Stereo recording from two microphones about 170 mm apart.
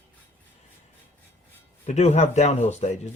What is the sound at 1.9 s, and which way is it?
Speech, 40° left (ahead or behind).